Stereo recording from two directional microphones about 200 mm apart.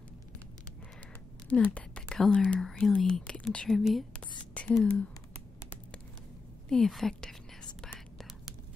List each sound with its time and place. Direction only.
1.5 s speech: 5° left (ahead or behind)
6.7 s speech: centre (ahead or behind)
7.8 s whispering: 5° left (ahead or behind)